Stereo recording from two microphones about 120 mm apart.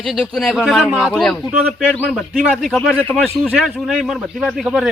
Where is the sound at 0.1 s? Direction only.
5° left (ahead or behind).